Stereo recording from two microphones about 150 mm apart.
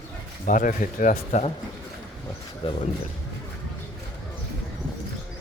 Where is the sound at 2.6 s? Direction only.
35° left (ahead or behind).